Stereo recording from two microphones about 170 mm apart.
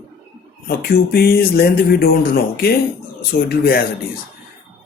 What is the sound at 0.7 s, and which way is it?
Speech, 65° left (ahead or behind).